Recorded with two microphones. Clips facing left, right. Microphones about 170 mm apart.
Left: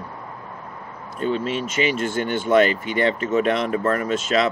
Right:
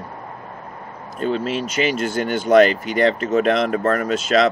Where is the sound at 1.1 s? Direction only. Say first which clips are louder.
Right 1 dB; 40° right (ahead or behind).